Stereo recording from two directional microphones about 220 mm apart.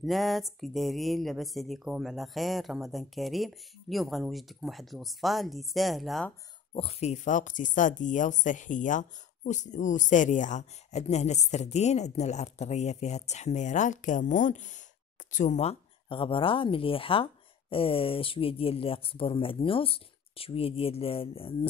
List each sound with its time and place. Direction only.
0.0 s speech: centre (ahead or behind)
6.7 s speech: 25° left (ahead or behind)